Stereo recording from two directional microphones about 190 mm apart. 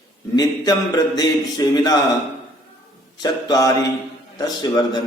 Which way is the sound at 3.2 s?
20° left (ahead or behind).